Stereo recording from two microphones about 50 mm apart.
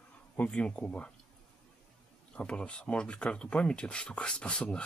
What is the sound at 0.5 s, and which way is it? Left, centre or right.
Speech, left.